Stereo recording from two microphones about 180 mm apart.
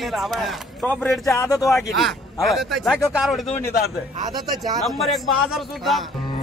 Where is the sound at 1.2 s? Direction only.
15° left (ahead or behind).